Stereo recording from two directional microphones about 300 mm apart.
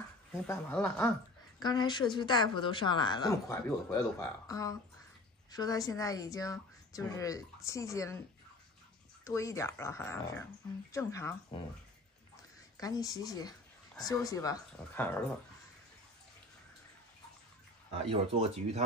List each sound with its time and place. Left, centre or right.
0.5 s speech: centre
9.2 s speech: centre
12.7 s speech: centre
18.0 s speech: centre